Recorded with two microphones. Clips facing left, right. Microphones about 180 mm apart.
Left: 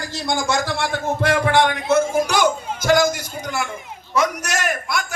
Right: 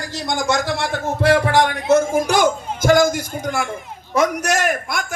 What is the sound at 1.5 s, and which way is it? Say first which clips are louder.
A man's voice: right 2 dB; 40° right (ahead or behind).